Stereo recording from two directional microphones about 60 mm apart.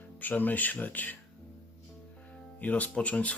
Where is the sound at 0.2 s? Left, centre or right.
Left.